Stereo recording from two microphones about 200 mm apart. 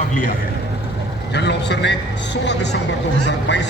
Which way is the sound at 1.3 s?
60° left (ahead or behind).